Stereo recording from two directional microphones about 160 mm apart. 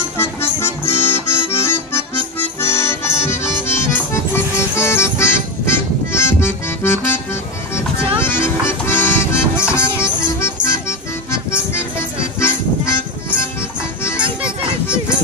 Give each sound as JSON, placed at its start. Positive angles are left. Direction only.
{"t": 0.2, "sound": "accordion", "side_deg": 15}
{"t": 2.3, "sound": "music", "side_deg": 15}
{"t": 6.1, "sound": "accordion", "side_deg": 15}
{"t": 8.2, "sound": "music", "side_deg": 15}